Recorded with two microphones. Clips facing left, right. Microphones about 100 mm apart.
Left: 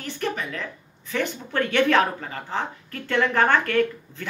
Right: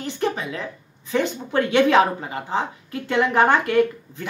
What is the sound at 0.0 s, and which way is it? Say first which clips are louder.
Speech: right 4 dB; 20° right (ahead or behind).